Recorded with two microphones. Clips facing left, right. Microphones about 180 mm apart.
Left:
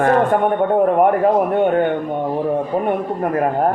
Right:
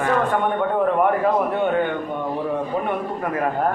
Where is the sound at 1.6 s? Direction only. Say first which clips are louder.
Left 5 dB; 50° left (ahead or behind).